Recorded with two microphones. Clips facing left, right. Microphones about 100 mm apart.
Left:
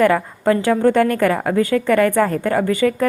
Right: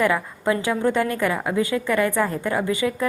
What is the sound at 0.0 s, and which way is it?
A woman's voice, 50° left (ahead or behind).